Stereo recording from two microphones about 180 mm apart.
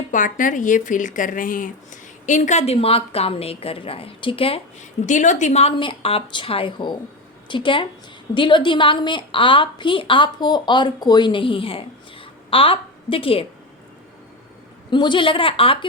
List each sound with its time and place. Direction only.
0.1 s a woman's voice: 45° left (ahead or behind); by 13.4 s 30° left (ahead or behind)
14.8 s a woman's voice: 25° left (ahead or behind)